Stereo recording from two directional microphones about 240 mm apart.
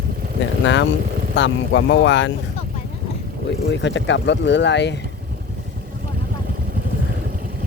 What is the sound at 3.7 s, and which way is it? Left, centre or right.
Speech, left.